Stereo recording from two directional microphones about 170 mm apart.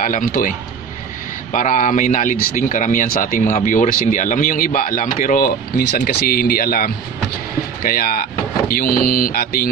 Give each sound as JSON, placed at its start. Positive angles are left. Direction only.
{"t": 0.0, "sound": "speech", "side_deg": 50}